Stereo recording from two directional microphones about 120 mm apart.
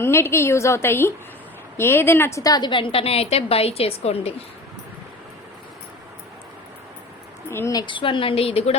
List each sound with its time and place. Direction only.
0.0 s a woman's voice: 20° left (ahead or behind)
2.4 s a woman's voice: 35° left (ahead or behind); by 4.4 s 55° left (ahead or behind)
7.7 s a woman's voice: 40° left (ahead or behind); by 8.8 s 60° left (ahead or behind)